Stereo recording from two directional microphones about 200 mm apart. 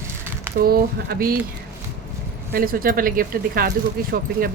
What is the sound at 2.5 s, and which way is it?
Speech, 45° right (ahead or behind).